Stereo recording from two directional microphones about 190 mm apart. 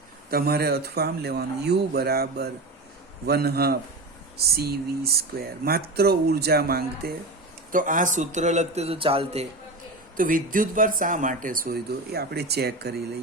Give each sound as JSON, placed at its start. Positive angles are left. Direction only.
{"t": 0.3, "sound": "speech", "side_deg": -55}
{"t": 7.7, "sound": "a man's voice", "side_deg": -45}
{"t": 10.2, "sound": "speech", "side_deg": -45}